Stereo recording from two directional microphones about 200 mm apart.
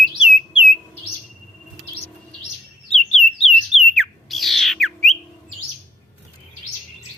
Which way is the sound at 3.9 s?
Centre (ahead or behind).